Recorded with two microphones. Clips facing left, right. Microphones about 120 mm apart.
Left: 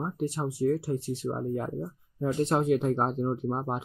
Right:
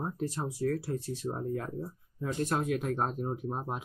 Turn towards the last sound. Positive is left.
turn(degrees=25)  # may be behind; listen again after turning